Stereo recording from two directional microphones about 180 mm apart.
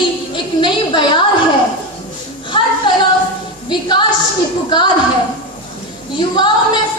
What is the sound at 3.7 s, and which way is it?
Speech, 25° left (ahead or behind).